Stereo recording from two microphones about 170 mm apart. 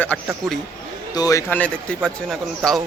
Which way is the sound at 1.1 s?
20° left (ahead or behind).